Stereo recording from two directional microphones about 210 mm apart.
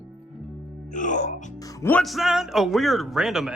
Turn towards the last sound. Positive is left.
turn(degrees=0)  # may be behind; listen again after turning